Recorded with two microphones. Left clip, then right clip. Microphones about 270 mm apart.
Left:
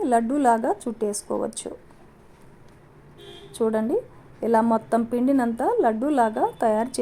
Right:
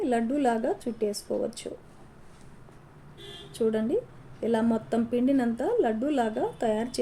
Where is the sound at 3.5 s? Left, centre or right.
Centre.